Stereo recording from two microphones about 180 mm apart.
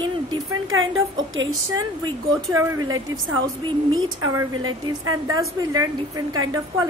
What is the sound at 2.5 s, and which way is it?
Speech, 15° right (ahead or behind).